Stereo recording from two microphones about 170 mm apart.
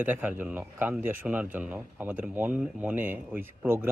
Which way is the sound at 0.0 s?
10° right (ahead or behind).